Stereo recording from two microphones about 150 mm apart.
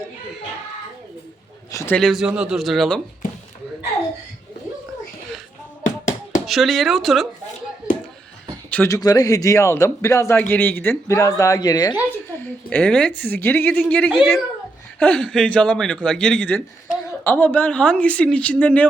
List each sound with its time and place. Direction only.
1.7 s a man's voice: 20° left (ahead or behind)
2.0 s speech: centre (ahead or behind)
5.8 s hands: 55° left (ahead or behind)
6.4 s speech: centre (ahead or behind)
8.7 s speech: 15° left (ahead or behind)
9.0 s a man's voice: 25° left (ahead or behind)
12.4 s a woman's voice: 10° left (ahead or behind)